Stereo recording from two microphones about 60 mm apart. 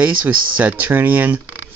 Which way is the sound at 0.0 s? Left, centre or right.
Right.